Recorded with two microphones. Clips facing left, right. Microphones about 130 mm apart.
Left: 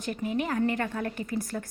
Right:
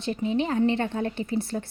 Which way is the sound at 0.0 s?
25° right (ahead or behind).